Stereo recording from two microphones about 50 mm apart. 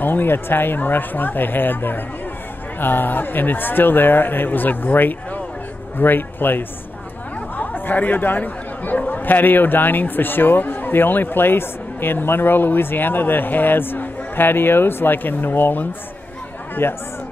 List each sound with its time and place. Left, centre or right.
0.0 s speech: left